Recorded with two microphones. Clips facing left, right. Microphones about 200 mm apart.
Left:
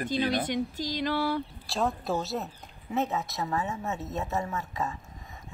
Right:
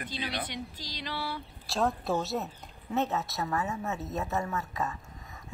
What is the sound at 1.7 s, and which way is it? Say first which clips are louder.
Speech: even; centre (ahead or behind).